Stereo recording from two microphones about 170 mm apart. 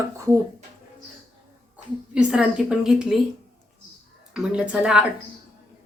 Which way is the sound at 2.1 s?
5° right (ahead or behind).